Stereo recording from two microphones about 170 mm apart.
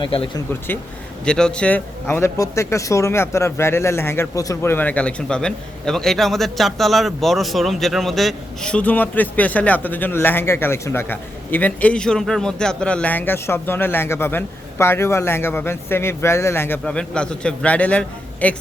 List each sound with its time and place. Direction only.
0.0 s speech: 30° left (ahead or behind)
1.2 s speech: 5° left (ahead or behind)